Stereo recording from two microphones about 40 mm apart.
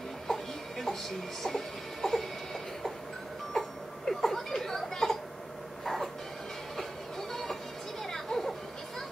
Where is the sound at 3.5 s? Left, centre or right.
Centre.